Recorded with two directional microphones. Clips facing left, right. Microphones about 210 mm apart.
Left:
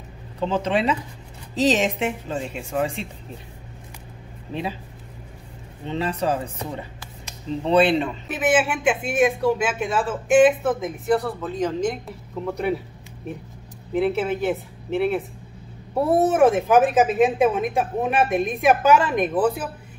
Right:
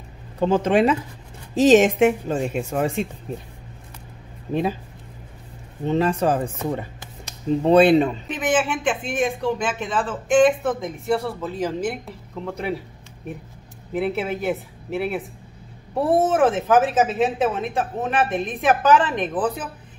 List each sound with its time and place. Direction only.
0.4 s speech: 50° right (ahead or behind)
5.9 s speech: 45° right (ahead or behind)
7.6 s speech: 45° right (ahead or behind)
8.3 s speech: 5° left (ahead or behind)
13.9 s speech: centre (ahead or behind)
16.3 s speech: 10° left (ahead or behind)